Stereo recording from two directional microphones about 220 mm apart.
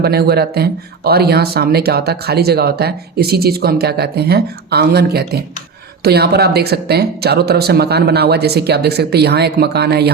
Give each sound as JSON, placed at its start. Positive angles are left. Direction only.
{"t": 0.0, "sound": "speech", "side_deg": -45}